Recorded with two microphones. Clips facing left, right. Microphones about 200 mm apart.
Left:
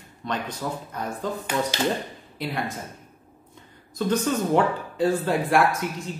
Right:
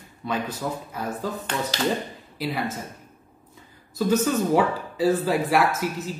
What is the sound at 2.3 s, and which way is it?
Speech, 5° right (ahead or behind).